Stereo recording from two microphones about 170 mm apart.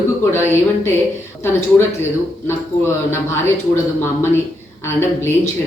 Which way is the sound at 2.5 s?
15° left (ahead or behind).